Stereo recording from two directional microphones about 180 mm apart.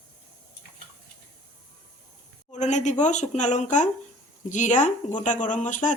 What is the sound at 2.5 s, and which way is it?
A woman's voice, 40° left (ahead or behind).